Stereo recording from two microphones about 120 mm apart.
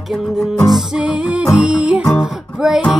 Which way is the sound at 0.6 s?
5° right (ahead or behind).